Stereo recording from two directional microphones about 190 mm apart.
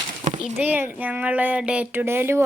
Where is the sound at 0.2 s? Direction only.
40° right (ahead or behind).